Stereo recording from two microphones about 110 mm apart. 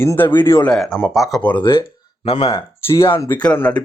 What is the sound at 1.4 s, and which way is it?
Speech, 15° left (ahead or behind).